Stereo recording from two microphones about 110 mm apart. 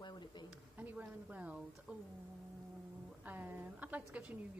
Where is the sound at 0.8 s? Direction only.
15° right (ahead or behind).